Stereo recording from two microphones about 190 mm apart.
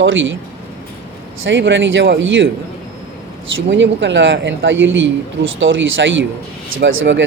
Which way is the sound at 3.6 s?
75° right (ahead or behind).